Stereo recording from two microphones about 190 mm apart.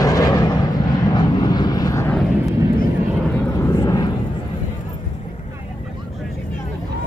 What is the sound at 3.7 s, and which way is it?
Vehicle, 20° left (ahead or behind).